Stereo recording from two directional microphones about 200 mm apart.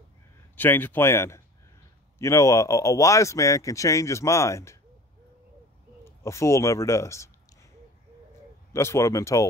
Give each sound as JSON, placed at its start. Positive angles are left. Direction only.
{"t": 0.6, "sound": "a man's voice", "side_deg": 10}
{"t": 6.0, "sound": "a man's voice", "side_deg": 15}
{"t": 8.7, "sound": "a man's voice", "side_deg": 15}